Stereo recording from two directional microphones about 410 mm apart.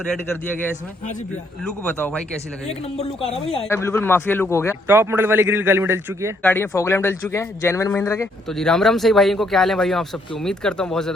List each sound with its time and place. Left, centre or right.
1.6 s a man's voice: centre
2.6 s a man's voice: centre
4.9 s a man's voice: centre